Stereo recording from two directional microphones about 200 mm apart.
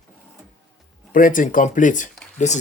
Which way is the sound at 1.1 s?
40° left (ahead or behind).